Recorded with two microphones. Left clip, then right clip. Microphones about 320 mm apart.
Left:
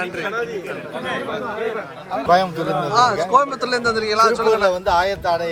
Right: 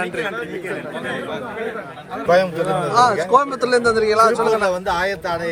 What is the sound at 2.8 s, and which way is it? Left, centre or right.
Speech, centre.